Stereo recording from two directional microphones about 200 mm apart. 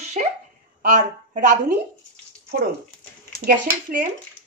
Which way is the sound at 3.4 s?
45° right (ahead or behind).